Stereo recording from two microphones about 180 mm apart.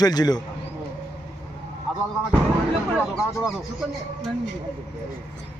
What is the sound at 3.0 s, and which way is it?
Speech, centre (ahead or behind).